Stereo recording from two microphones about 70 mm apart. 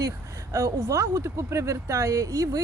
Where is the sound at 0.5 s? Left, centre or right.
Right.